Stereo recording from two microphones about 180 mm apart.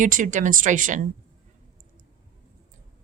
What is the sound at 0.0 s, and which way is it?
A woman's voice, 45° right (ahead or behind).